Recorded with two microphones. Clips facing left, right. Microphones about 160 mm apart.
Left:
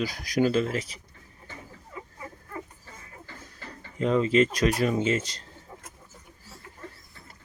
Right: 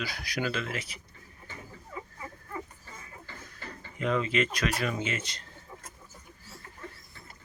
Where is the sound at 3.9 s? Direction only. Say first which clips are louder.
Left 6 dB; 30° left (ahead or behind).